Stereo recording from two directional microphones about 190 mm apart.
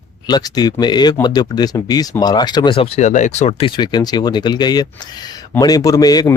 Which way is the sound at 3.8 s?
20° left (ahead or behind).